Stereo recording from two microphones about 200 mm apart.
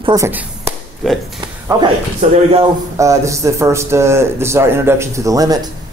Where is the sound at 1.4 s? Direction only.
20° right (ahead or behind).